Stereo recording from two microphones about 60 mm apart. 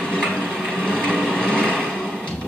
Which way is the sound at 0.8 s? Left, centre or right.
Centre.